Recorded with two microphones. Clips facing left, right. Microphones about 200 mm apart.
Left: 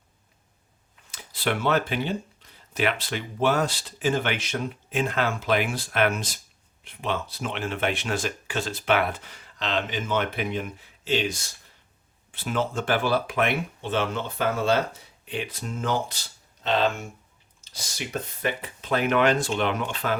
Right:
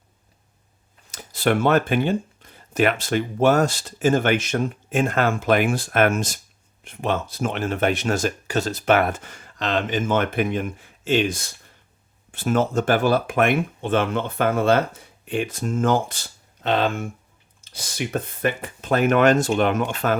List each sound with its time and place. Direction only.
1.1 s speech: 45° right (ahead or behind)